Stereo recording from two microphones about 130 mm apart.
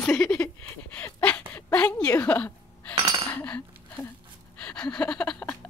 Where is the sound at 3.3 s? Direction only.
10° left (ahead or behind).